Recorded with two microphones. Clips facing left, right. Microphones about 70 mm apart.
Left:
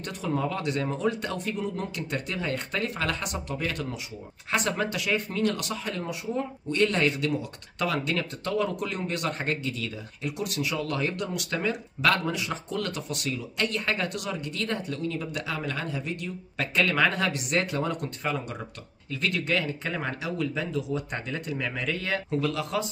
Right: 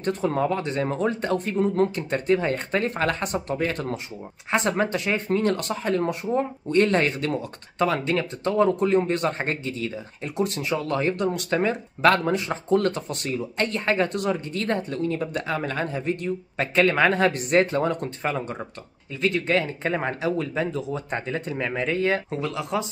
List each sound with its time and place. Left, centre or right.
0.0 s speech: right